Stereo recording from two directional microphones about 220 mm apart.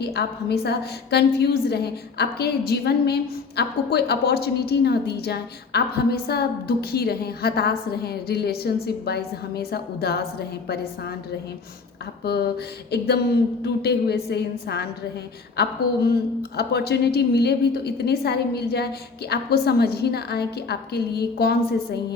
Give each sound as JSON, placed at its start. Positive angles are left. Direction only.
{"t": 0.0, "sound": "a woman's voice", "side_deg": 50}
{"t": 12.2, "sound": "a woman's voice", "side_deg": 45}